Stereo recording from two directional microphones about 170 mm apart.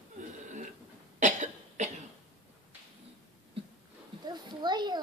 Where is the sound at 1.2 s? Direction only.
45° right (ahead or behind).